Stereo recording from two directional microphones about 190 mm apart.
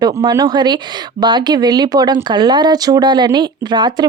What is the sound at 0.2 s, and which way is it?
Speech, 20° right (ahead or behind).